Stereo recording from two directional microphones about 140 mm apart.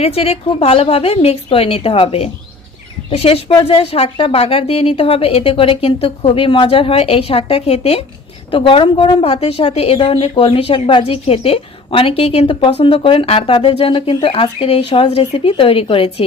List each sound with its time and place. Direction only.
0.0 s a woman's voice: 45° left (ahead or behind)